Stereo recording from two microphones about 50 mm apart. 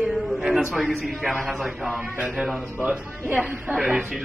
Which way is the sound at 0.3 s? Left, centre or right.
Centre.